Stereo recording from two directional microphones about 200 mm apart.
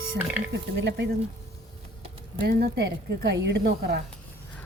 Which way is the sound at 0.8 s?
60° right (ahead or behind).